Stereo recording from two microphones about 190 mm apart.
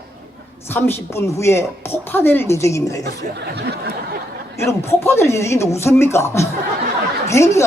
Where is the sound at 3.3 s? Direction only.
60° right (ahead or behind).